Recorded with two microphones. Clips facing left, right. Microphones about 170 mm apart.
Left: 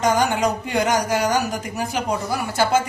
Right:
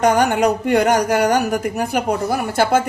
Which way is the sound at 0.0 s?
60° right (ahead or behind).